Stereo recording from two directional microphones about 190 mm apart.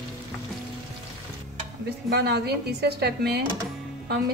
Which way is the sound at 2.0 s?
60° right (ahead or behind).